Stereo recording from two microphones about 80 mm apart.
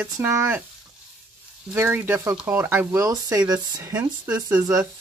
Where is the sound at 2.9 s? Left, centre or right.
Right.